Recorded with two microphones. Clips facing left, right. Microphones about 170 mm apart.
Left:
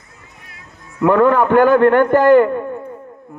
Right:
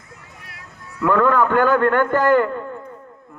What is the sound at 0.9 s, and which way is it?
A man's voice, 20° left (ahead or behind).